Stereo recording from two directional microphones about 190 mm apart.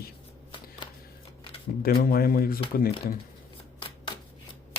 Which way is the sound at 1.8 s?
50° left (ahead or behind).